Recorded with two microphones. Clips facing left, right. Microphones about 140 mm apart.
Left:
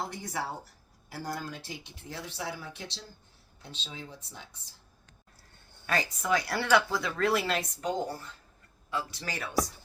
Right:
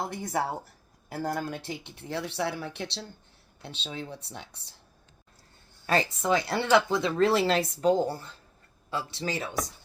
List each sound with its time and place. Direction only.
0.1 s speech: 50° right (ahead or behind); by 4.7 s 70° right (ahead or behind)
5.8 s speech: 30° right (ahead or behind)